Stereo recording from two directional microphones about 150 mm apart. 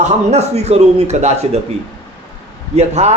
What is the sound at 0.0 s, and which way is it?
Speech, 45° right (ahead or behind).